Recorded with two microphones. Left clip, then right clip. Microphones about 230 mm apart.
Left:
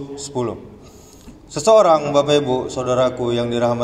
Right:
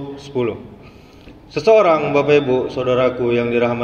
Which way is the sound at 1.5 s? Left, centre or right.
Left.